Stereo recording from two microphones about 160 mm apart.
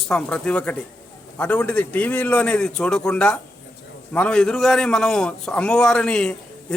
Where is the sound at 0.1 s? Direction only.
5° left (ahead or behind).